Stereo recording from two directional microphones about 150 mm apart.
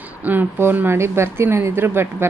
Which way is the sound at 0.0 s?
10° right (ahead or behind).